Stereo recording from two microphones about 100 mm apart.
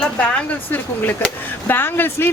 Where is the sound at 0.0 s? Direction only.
10° left (ahead or behind).